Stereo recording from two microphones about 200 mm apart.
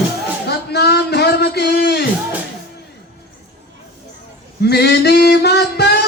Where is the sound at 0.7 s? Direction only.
55° left (ahead or behind).